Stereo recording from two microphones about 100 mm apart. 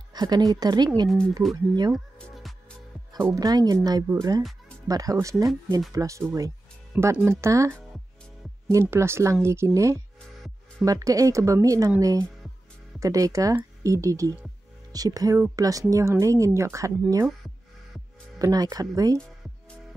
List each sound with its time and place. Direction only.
0.1 s speech: 45° right (ahead or behind)
3.3 s speech: 40° right (ahead or behind)
10.9 s speech: 35° right (ahead or behind)
18.4 s speech: 40° right (ahead or behind)